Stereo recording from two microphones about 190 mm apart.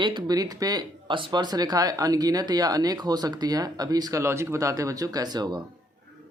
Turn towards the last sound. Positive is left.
turn(degrees=-20)  # may be behind; listen again after turning